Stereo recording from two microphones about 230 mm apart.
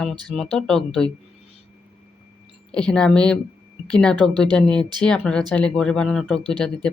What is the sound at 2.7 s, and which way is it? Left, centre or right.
Speech, centre.